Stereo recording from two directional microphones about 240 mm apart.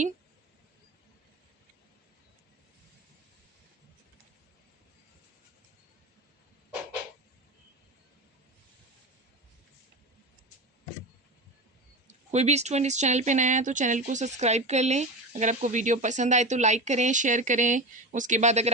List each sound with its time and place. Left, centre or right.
12.3 s speech: right